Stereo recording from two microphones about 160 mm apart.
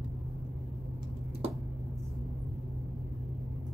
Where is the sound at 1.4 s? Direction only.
40° right (ahead or behind).